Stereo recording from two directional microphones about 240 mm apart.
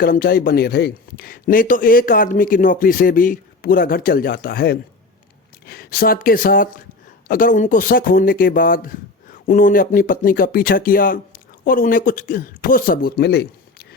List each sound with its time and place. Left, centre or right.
0.0 s a man's voice: left